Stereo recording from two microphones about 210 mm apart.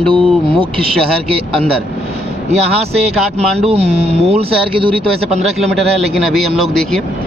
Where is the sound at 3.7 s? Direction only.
30° right (ahead or behind).